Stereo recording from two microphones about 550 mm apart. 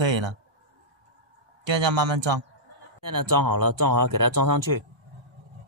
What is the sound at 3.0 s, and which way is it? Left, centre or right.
Speech, right.